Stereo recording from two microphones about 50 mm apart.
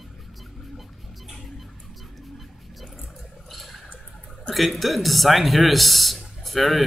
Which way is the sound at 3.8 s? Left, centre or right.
Left.